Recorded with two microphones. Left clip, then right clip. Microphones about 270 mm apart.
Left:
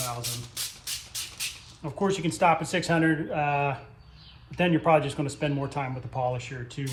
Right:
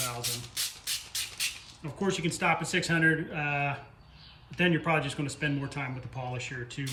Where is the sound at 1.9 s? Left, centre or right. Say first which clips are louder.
Left 5 dB; centre.